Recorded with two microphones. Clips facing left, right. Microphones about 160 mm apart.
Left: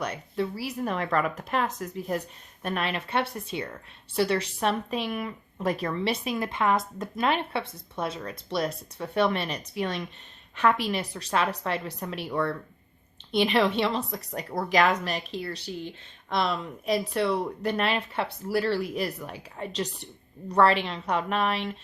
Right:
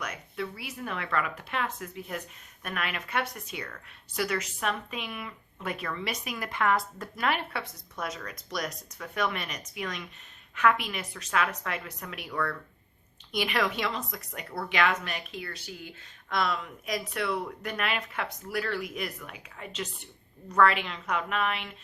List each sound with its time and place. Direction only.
0.0 s a woman's voice: 35° left (ahead or behind)